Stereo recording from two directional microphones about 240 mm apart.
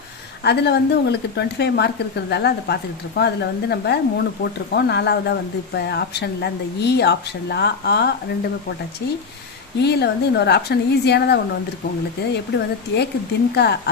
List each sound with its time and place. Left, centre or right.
0.4 s speech: left
9.8 s speech: left